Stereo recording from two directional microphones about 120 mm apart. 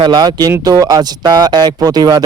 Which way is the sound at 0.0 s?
35° right (ahead or behind).